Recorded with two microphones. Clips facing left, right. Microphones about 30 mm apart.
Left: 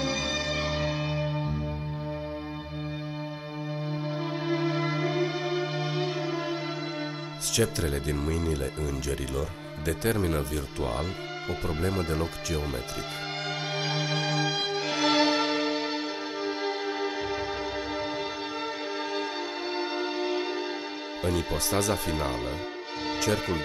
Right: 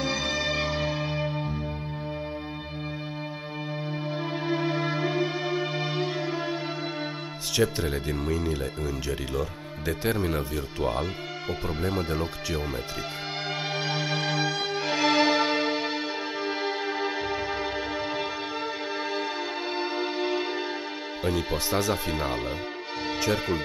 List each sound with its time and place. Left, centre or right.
0.0 s music: centre
0.9 s church bell: centre
4.1 s music: centre
7.5 s speech: centre
13.7 s music: centre
19.7 s music: centre
21.2 s speech: centre
23.0 s music: centre